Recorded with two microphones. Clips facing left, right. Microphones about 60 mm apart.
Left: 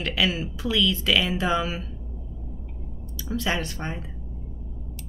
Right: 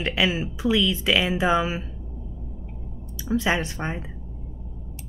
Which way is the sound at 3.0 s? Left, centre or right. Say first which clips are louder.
Right 4 dB; right.